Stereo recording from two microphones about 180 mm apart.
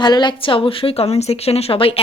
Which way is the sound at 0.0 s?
25° left (ahead or behind).